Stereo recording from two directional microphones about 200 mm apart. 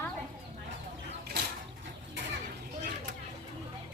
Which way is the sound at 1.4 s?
55° right (ahead or behind).